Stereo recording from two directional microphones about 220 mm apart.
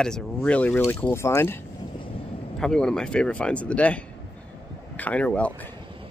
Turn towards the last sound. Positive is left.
turn(degrees=5)  # may be behind; listen again after turning